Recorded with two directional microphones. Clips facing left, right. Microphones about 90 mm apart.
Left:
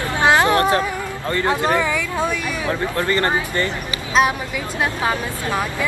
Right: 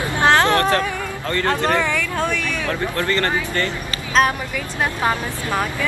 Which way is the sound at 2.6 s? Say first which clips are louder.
Left 2 dB; 15° left (ahead or behind).